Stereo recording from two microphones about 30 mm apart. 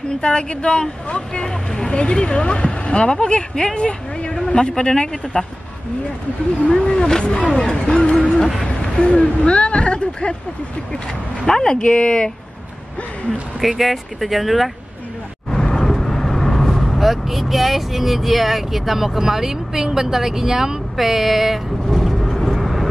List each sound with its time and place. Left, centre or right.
0.1 s speech: left
5.3 s speech: left
7.0 s speech: left
8.1 s speech: left
11.4 s speech: centre
11.9 s speech: left
13.6 s speech: centre
15.5 s vehicle: centre
17.0 s speech: centre
21.9 s vehicle: centre